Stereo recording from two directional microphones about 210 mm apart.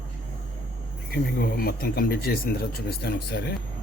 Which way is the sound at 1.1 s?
45° left (ahead or behind).